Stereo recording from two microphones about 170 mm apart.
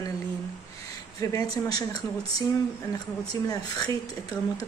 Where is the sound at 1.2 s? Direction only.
20° left (ahead or behind).